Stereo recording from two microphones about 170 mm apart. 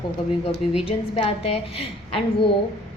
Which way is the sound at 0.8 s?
35° left (ahead or behind).